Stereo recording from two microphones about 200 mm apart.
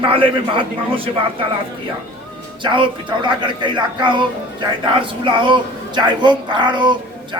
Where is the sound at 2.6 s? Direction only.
25° right (ahead or behind).